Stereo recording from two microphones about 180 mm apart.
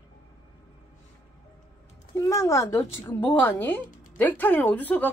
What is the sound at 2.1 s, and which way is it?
Speech, 20° left (ahead or behind).